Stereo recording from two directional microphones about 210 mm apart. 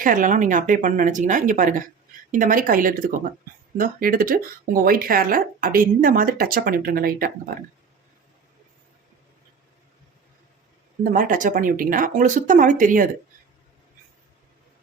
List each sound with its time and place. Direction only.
0.0 s speech: 40° right (ahead or behind)
11.0 s speech: 40° right (ahead or behind)